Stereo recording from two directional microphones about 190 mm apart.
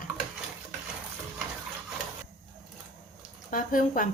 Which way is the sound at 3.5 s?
45° left (ahead or behind).